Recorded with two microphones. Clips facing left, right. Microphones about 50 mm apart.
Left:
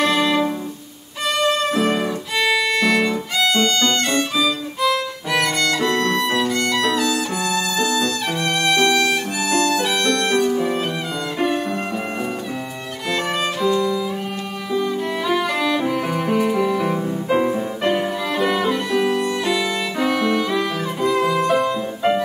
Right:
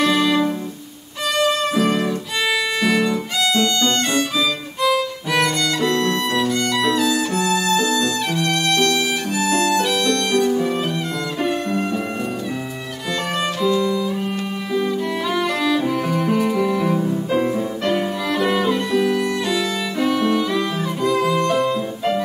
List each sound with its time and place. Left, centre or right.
0.0 s music: centre
3.3 s violin: centre
9.4 s violin: centre
10.0 s music: centre
13.1 s music: centre
15.2 s music: centre
18.3 s violin: centre
20.2 s music: centre